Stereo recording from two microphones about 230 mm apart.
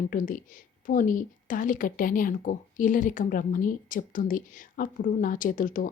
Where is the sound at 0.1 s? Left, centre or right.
Left.